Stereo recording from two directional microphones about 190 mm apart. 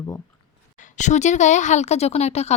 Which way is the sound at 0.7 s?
40° left (ahead or behind).